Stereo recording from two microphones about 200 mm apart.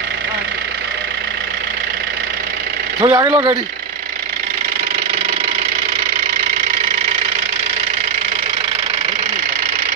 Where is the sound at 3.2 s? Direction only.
25° right (ahead or behind).